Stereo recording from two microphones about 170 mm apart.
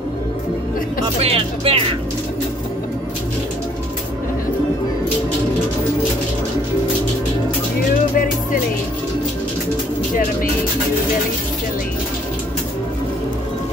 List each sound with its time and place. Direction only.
1.0 s speech: 35° right (ahead or behind)